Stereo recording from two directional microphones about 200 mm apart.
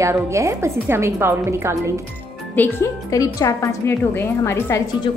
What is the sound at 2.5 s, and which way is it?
A woman's voice, 15° left (ahead or behind).